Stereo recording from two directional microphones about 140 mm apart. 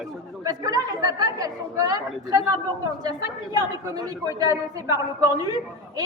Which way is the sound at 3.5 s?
25° right (ahead or behind).